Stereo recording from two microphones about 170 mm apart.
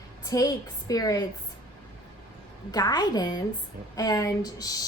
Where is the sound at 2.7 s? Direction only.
25° left (ahead or behind).